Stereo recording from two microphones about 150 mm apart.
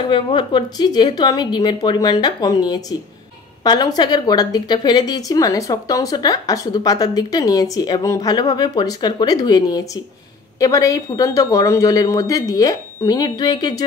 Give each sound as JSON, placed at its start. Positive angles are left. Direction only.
{"t": 0.1, "sound": "a woman's voice", "side_deg": 35}